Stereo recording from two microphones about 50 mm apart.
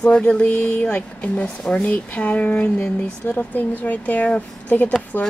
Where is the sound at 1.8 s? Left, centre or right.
Left.